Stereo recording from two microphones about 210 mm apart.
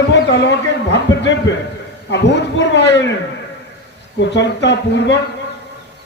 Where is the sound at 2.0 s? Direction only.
55° left (ahead or behind).